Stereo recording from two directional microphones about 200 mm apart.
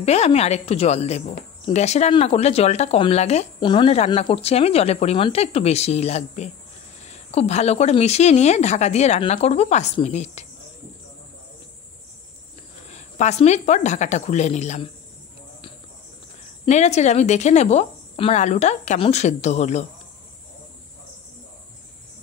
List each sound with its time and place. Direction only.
0.0 s speech: 30° left (ahead or behind)
12.8 s speech: 35° left (ahead or behind)
16.6 s speech: 35° left (ahead or behind)